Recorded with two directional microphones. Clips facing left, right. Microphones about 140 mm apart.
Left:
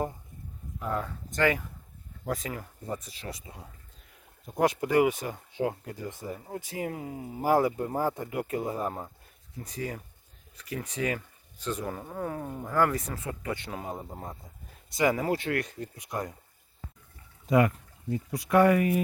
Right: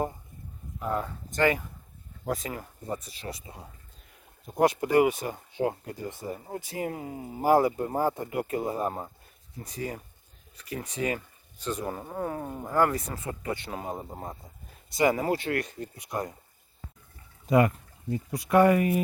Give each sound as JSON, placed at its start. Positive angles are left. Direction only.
{"t": 0.9, "sound": "speech", "side_deg": -25}
{"t": 4.8, "sound": "speech", "side_deg": -35}
{"t": 10.7, "sound": "speech", "side_deg": -30}
{"t": 14.9, "sound": "speech", "side_deg": -35}
{"t": 17.5, "sound": "speech", "side_deg": -30}